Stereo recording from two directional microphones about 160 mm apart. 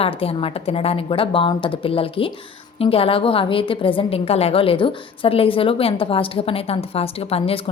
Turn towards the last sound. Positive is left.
turn(degrees=40)  # may be behind; listen again after turning